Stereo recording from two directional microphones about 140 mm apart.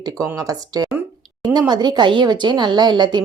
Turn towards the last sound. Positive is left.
turn(degrees=-30)  # may be behind; listen again after turning